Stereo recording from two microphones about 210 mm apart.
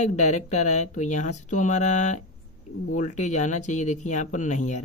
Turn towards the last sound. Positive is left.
turn(degrees=35)  # may be behind; listen again after turning